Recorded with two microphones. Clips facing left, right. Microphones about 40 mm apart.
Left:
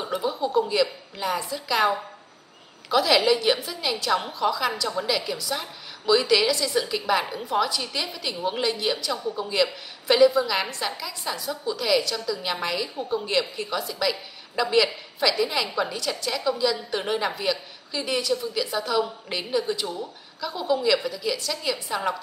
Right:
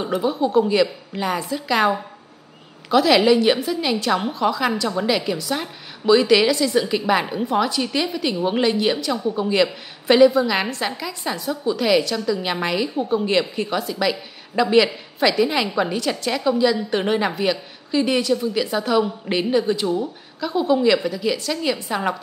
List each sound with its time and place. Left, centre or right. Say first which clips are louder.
0.0 s a woman's voice: right 6 dB; centre